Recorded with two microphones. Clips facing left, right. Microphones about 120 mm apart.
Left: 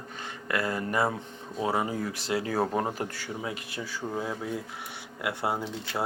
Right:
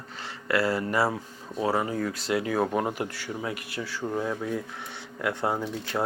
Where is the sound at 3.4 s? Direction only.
20° left (ahead or behind).